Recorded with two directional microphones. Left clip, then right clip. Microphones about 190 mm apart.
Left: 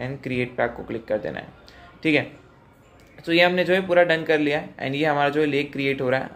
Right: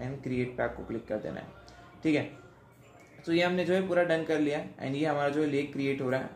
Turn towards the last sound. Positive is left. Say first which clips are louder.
# left 8 dB
turn(degrees=15)  # may be behind; listen again after turning